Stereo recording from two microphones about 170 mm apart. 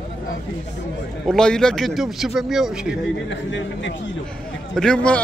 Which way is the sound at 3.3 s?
90° left.